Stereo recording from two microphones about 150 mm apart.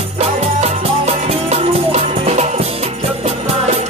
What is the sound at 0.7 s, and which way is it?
Music, 45° right (ahead or behind).